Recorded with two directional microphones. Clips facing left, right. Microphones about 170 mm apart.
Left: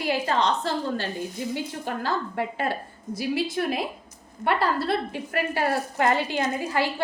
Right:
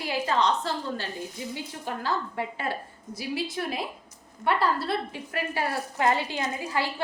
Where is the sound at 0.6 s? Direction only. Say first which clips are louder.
Left 4 dB; 65° left (ahead or behind).